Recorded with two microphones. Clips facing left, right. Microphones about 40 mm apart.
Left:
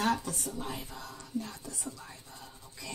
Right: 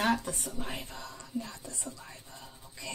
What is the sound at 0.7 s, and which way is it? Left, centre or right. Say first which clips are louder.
Speech: even; right.